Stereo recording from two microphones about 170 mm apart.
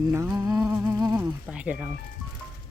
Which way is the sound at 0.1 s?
15° right (ahead or behind).